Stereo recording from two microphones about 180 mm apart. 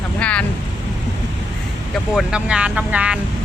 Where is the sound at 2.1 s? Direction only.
5° right (ahead or behind).